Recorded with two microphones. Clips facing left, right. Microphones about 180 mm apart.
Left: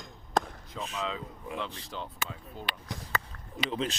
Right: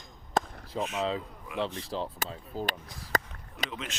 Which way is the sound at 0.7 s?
35° right (ahead or behind).